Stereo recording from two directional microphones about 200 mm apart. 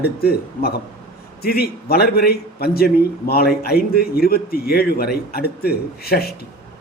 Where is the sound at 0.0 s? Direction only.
50° left (ahead or behind).